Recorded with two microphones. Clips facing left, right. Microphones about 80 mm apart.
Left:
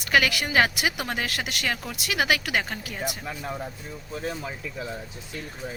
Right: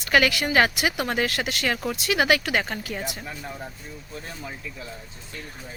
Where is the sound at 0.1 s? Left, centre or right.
Centre.